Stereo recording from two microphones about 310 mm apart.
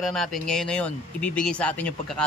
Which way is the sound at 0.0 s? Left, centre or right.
Centre.